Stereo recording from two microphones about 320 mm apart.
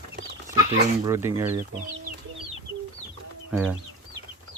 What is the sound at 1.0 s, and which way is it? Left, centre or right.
Speech, centre.